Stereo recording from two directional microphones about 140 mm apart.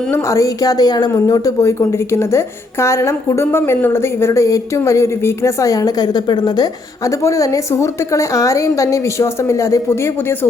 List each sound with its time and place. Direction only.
0.1 s a woman's voice: 20° left (ahead or behind)